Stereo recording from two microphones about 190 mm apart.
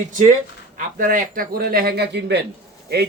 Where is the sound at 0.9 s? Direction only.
45° right (ahead or behind).